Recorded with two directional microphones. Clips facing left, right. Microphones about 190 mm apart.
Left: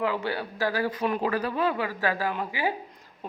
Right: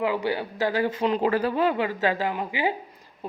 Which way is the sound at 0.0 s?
15° right (ahead or behind).